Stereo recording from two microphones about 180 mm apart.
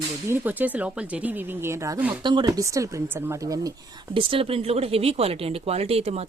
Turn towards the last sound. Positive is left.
turn(degrees=-35)  # may be behind; listen again after turning